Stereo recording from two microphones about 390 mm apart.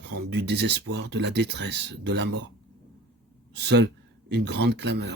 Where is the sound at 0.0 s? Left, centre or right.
Right.